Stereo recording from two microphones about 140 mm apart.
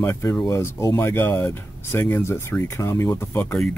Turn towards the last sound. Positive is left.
turn(degrees=15)  # may be behind; listen again after turning